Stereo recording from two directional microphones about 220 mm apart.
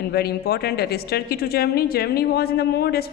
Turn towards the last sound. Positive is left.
turn(degrees=45)  # may be behind; listen again after turning